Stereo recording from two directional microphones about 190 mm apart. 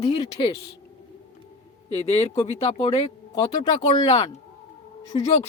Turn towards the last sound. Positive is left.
turn(degrees=30)  # may be behind; listen again after turning